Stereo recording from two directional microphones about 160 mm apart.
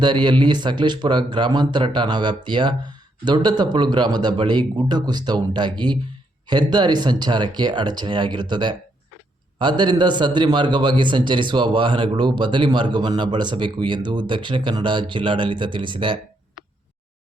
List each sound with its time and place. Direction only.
0.0 s a man's voice: 30° right (ahead or behind)